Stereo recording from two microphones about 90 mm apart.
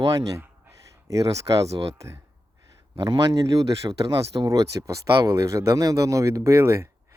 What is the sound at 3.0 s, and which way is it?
Speech, 50° right (ahead or behind).